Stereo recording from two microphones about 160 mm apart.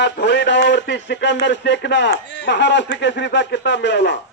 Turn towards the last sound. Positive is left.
turn(degrees=90)